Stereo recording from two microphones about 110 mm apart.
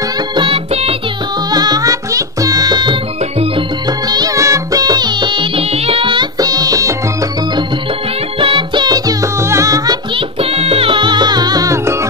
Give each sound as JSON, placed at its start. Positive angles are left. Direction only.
{"t": 0.4, "sound": "music", "side_deg": -55}
{"t": 1.5, "sound": "music", "side_deg": -40}
{"t": 4.1, "sound": "music", "side_deg": -35}
{"t": 6.4, "sound": "music", "side_deg": -35}
{"t": 8.4, "sound": "music", "side_deg": -50}
{"t": 9.4, "sound": "music", "side_deg": -25}
{"t": 10.5, "sound": "music", "side_deg": -65}